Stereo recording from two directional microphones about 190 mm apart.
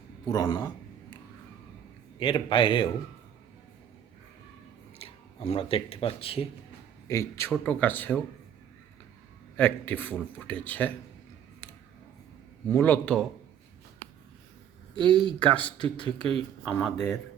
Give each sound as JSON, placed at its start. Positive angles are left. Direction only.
{"t": 0.3, "sound": "a man's voice", "side_deg": 20}
{"t": 2.1, "sound": "a man's voice", "side_deg": 25}
{"t": 4.9, "sound": "speech", "side_deg": 30}
{"t": 7.1, "sound": "speech", "side_deg": 15}
{"t": 9.6, "sound": "speech", "side_deg": 10}
{"t": 12.7, "sound": "speech", "side_deg": 10}
{"t": 15.0, "sound": "speech", "side_deg": 5}